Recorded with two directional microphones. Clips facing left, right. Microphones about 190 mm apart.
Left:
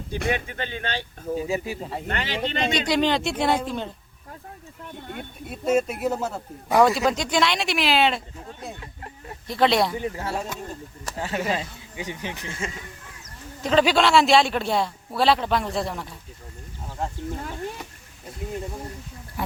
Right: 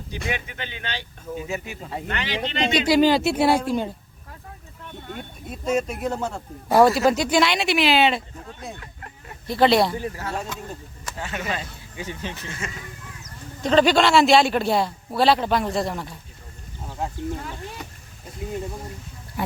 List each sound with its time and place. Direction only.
0.1 s speech: 45° left (ahead or behind)
1.5 s speech: 35° left (ahead or behind)
2.0 s speech: 45° left (ahead or behind)
2.8 s speech: 5° right (ahead or behind)
5.5 s speech: 5° left (ahead or behind)
10.0 s speech: 25° left (ahead or behind)
11.0 s speech: 35° left (ahead or behind)
11.9 s speech: 15° left (ahead or behind)
13.6 s speech: 5° left (ahead or behind)
19.4 s speech: centre (ahead or behind)